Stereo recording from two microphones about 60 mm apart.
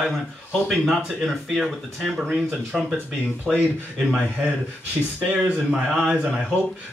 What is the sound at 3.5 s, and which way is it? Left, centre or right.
Speech, centre.